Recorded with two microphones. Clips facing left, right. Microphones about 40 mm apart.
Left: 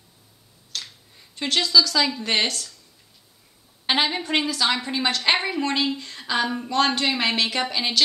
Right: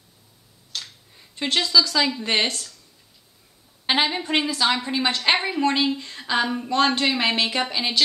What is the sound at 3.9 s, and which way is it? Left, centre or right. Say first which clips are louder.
A woman's voice: right 1 dB; centre.